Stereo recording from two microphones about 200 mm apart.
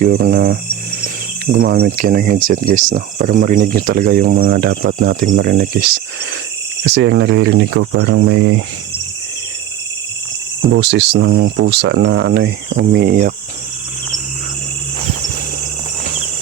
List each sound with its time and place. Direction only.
0.0 s speech: 45° right (ahead or behind); by 8.6 s 70° right (ahead or behind)
10.7 s speech: 60° right (ahead or behind)